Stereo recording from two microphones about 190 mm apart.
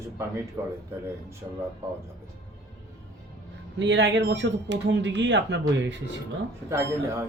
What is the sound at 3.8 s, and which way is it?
Speech, 70° right (ahead or behind).